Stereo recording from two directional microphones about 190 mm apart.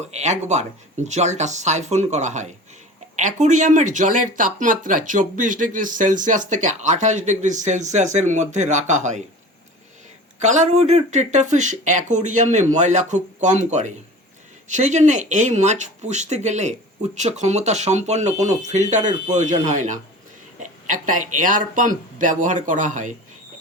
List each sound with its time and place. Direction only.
0.0 s speech: 35° right (ahead or behind)
10.4 s speech: 40° right (ahead or behind)